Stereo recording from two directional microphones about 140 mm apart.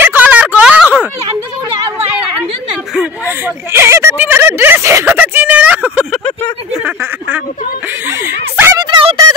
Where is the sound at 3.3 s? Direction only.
15° right (ahead or behind).